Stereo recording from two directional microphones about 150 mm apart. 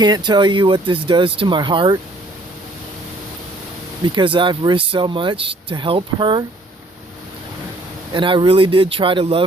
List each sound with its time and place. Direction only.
0.0 s speech: 30° right (ahead or behind)
4.0 s speech: 30° right (ahead or behind)
8.1 s speech: 35° right (ahead or behind)